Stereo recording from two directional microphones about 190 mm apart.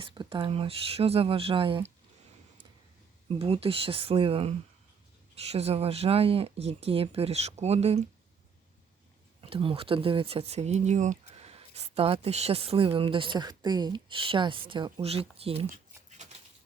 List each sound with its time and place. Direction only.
0.0 s speech: 25° right (ahead or behind)
3.2 s speech: 30° right (ahead or behind)
9.4 s speech: 30° right (ahead or behind)
15.7 s patter: 40° right (ahead or behind)